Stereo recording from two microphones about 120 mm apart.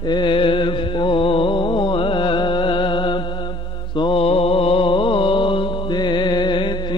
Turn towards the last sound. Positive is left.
turn(degrees=40)  # may be behind; listen again after turning